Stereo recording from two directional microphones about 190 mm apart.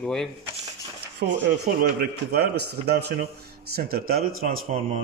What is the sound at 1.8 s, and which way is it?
A man's voice, 55° right (ahead or behind).